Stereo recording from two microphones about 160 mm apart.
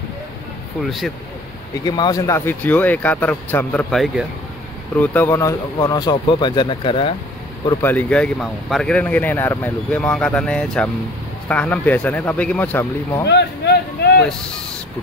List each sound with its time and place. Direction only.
0.8 s speech: centre (ahead or behind)
1.9 s speech: 25° left (ahead or behind)
7.8 s speech: 10° left (ahead or behind)
13.3 s a sound: 90° left